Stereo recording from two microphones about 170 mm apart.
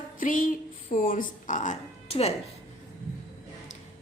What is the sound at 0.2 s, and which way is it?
Speech, 50° left (ahead or behind).